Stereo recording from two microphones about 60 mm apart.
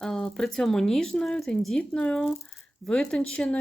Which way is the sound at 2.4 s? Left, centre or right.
Centre.